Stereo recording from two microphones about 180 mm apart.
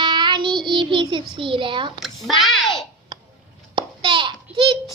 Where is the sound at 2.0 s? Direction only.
Centre (ahead or behind).